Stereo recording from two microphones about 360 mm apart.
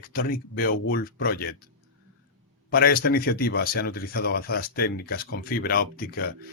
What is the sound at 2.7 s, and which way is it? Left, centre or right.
Speech, left.